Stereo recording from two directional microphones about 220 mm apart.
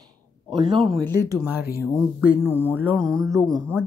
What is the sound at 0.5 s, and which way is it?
Speech, 20° right (ahead or behind).